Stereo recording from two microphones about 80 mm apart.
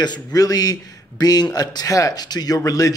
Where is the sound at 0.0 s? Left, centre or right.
Left.